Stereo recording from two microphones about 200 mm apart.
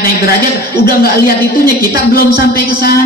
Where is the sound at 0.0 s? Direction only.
50° left (ahead or behind).